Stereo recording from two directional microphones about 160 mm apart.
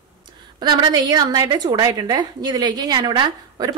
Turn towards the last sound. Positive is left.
turn(degrees=-25)  # may be behind; listen again after turning